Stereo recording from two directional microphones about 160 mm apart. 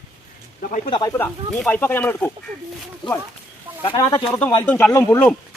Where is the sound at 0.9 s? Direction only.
25° left (ahead or behind).